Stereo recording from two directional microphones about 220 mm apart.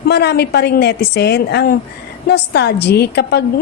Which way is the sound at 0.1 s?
50° left (ahead or behind).